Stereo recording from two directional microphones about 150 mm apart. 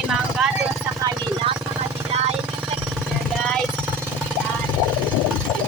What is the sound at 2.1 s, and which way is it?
Vehicle, 45° right (ahead or behind).